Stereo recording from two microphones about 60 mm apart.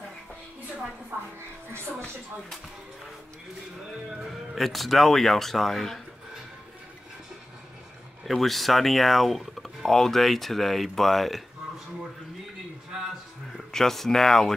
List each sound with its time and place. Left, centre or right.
1.1 s a woman's voice: right
4.6 s speech: centre
8.3 s speech: centre
13.7 s speech: centre